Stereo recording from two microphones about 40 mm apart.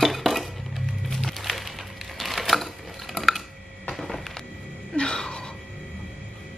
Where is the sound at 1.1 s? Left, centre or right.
Centre.